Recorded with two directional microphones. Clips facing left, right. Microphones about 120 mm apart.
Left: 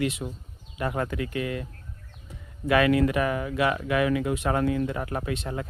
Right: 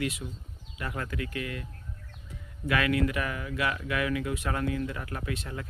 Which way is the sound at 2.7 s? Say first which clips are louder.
Left 6 dB; 30° left (ahead or behind).